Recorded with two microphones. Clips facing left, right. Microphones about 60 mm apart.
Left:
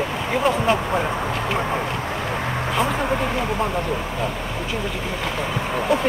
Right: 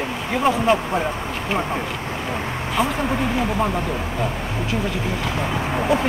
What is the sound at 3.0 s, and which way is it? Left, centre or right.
Speech, centre.